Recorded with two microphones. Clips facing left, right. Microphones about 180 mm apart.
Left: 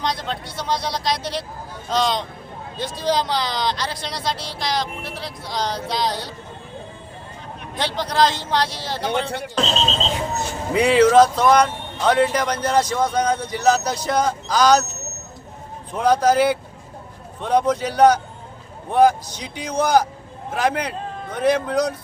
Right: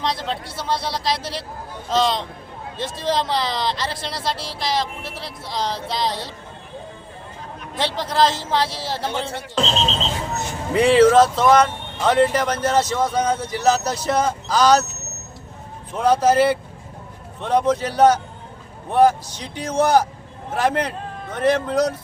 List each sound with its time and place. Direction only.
0.0 s speech: centre (ahead or behind)
7.8 s speech: centre (ahead or behind)
10.8 s speech: 5° right (ahead or behind)
16.0 s speech: 5° right (ahead or behind)